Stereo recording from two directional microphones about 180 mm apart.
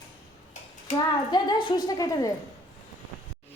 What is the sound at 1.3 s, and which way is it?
Speech, 25° left (ahead or behind).